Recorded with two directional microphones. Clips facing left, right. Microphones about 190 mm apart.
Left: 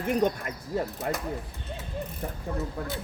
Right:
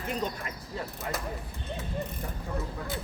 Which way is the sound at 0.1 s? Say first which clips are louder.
Left 8 dB; 55° left (ahead or behind).